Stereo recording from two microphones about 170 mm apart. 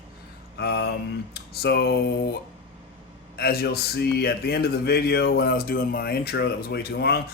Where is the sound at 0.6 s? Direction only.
75° left (ahead or behind).